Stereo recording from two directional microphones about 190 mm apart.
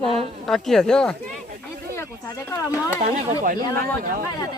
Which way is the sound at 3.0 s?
45° right (ahead or behind).